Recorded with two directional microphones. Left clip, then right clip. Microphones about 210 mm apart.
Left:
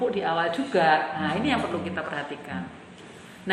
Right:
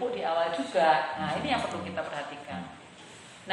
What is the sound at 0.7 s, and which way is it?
Speech, 50° left (ahead or behind).